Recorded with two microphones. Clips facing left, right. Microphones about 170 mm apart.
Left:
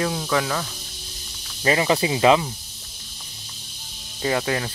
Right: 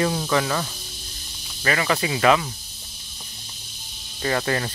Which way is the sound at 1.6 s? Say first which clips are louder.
Left 3 dB; 20° left (ahead or behind).